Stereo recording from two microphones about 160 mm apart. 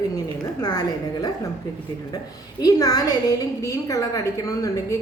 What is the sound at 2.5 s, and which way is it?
A woman's voice, 25° left (ahead or behind).